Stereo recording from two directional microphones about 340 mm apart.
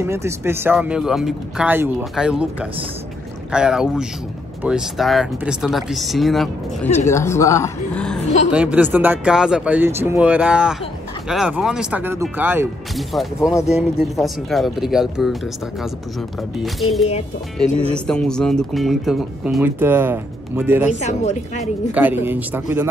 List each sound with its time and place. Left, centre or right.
0.0 s speech: centre
3.5 s speech: centre
16.6 s speech: centre
21.0 s a woman's voice: centre
21.9 s speech: centre